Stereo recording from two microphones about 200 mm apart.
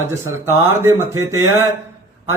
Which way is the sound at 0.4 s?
10° right (ahead or behind).